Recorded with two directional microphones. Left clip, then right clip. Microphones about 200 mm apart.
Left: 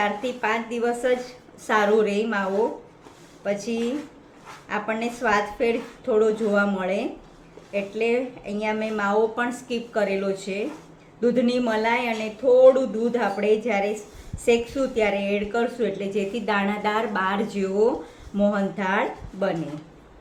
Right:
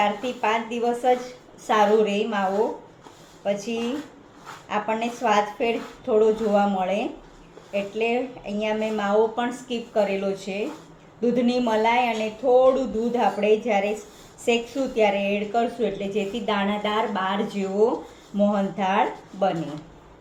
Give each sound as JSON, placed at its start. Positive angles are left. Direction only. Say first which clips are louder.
{"t": 0.0, "sound": "a woman's voice", "louder": "right 1 dB", "side_deg": 25}
{"t": 3.4, "sound": "a woman's voice", "louder": "even", "side_deg": 25}